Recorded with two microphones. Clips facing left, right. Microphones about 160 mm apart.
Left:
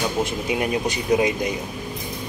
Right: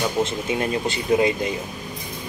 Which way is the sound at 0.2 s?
15° left (ahead or behind).